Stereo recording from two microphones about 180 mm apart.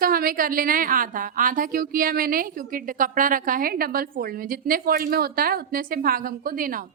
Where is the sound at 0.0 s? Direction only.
55° right (ahead or behind).